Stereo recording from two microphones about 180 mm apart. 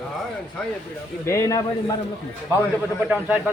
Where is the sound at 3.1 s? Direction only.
10° right (ahead or behind).